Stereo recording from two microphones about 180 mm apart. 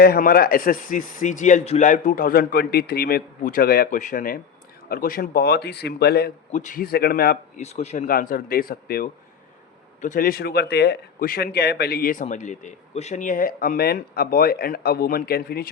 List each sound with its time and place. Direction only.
0.0 s speech: 55° left (ahead or behind)
6.5 s speech: 45° left (ahead or behind)
7.6 s speech: 35° left (ahead or behind)
8.0 s speech: 50° left (ahead or behind)